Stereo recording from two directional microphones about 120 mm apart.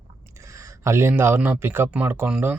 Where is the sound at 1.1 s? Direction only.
15° right (ahead or behind).